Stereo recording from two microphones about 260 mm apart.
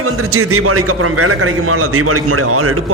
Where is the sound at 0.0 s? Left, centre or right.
Right.